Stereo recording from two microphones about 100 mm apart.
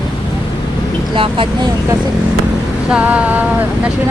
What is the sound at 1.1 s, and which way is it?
Speech, 60° right (ahead or behind).